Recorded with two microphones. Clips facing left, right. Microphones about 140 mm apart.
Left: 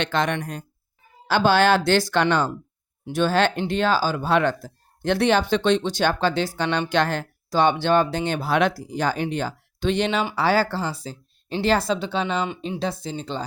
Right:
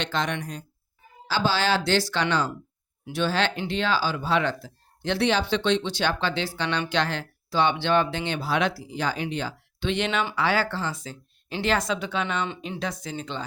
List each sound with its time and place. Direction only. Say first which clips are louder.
0.0 s speech: left 4 dB; 60° left (ahead or behind); by 13.4 s 30° left (ahead or behind)